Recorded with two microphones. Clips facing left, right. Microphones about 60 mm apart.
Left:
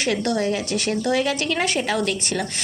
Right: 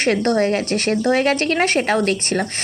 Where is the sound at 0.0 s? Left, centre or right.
Right.